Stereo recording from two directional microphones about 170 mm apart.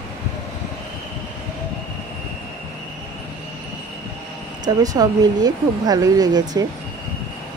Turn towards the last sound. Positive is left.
turn(degrees=-20)  # may be behind; listen again after turning